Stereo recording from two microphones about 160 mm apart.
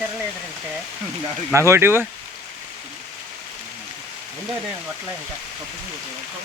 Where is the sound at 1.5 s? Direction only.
15° right (ahead or behind).